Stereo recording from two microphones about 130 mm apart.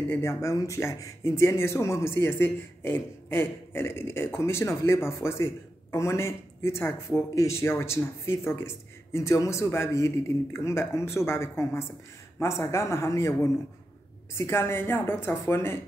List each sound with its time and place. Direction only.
0.1 s speech: 20° left (ahead or behind)